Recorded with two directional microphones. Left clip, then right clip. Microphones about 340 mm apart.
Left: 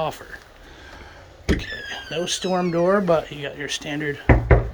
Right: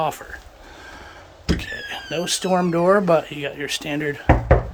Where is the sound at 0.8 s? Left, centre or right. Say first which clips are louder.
Right 3 dB; centre.